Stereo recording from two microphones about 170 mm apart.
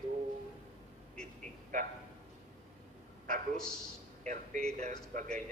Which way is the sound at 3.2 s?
50° right (ahead or behind).